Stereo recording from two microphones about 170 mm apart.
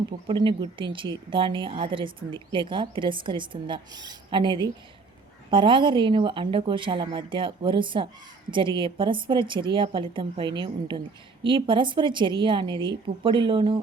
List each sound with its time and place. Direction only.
0.3 s a woman's voice: 25° right (ahead or behind)